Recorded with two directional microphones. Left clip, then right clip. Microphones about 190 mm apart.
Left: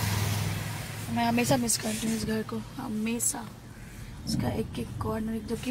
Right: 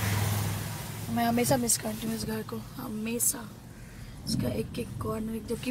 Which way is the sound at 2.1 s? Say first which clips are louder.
Left 3 dB; centre (ahead or behind).